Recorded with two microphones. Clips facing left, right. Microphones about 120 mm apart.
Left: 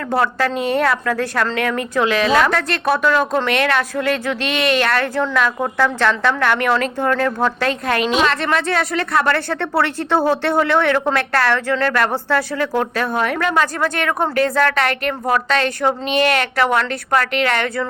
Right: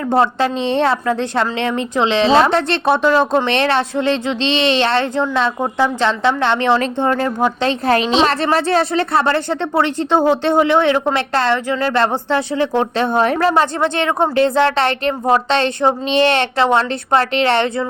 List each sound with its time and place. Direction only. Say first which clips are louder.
0.1 s a woman's voice: right 3 dB; 25° right (ahead or behind)
7.7 s a woman's voice: right 3 dB; 30° right (ahead or behind)